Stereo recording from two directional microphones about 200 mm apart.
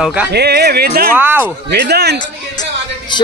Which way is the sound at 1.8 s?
55° right (ahead or behind).